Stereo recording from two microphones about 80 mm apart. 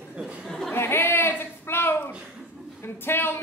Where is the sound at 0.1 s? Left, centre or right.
Centre.